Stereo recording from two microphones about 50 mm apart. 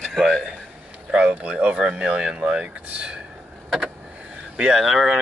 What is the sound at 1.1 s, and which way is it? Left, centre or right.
Speech, right.